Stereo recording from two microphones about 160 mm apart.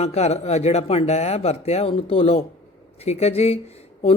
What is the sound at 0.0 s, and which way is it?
A man's voice, 40° left (ahead or behind).